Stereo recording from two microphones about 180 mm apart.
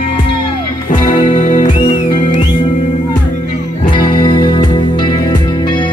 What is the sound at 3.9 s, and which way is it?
Music, 25° left (ahead or behind).